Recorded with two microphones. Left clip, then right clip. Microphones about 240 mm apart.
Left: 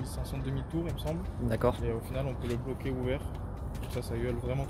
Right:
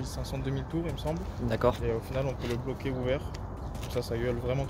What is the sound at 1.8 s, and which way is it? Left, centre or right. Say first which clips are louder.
Speech: right 4 dB; right.